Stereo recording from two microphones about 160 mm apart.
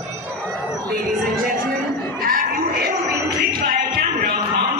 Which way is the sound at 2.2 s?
70° right (ahead or behind).